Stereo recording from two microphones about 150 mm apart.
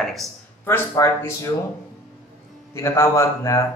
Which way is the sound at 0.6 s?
15° left (ahead or behind).